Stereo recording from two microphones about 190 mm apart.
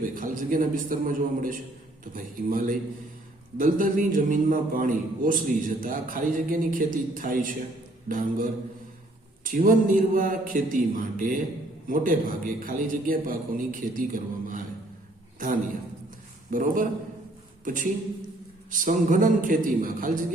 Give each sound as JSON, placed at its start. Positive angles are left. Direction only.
{"t": 0.0, "sound": "a man's voice", "side_deg": -45}
{"t": 16.5, "sound": "a man's voice", "side_deg": -45}
{"t": 18.7, "sound": "a man's voice", "side_deg": -45}